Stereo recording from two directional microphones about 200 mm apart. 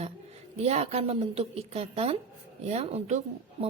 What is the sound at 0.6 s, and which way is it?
A woman's voice, 30° right (ahead or behind).